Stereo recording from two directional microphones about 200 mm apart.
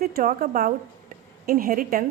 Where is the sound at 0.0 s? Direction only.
45° right (ahead or behind).